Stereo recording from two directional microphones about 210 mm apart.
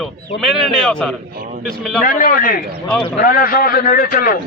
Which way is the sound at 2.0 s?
40° left (ahead or behind).